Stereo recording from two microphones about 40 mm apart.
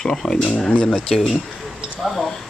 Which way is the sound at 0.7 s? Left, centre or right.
Left.